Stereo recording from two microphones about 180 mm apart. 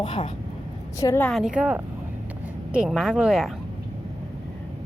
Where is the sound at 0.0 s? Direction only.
25° left (ahead or behind).